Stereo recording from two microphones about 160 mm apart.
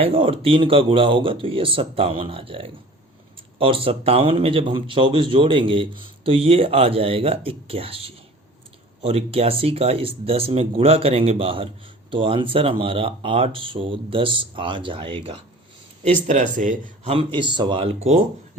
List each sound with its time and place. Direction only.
0.0 s a man's voice: 35° right (ahead or behind)
16.2 s speech: 50° right (ahead or behind)
17.1 s a man's voice: 30° right (ahead or behind)